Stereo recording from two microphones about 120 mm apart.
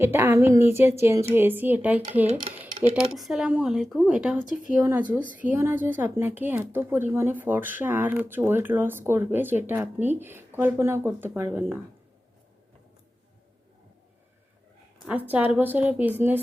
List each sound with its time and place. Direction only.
0.0 s speech: 20° right (ahead or behind)
2.9 s speech: 5° right (ahead or behind); by 11.8 s 20° right (ahead or behind)
15.0 s speech: 15° right (ahead or behind)